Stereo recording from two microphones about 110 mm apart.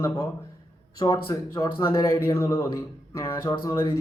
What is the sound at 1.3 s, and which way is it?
A man's voice, 25° left (ahead or behind).